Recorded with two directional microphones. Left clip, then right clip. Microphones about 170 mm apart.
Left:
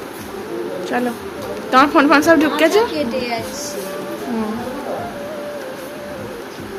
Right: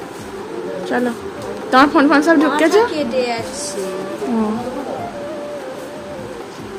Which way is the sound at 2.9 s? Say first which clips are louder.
Right 2 dB; 45° right (ahead or behind).